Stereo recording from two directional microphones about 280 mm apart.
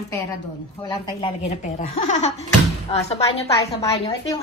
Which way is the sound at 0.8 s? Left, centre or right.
Centre.